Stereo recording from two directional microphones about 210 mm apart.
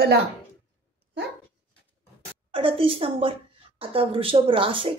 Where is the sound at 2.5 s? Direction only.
25° right (ahead or behind).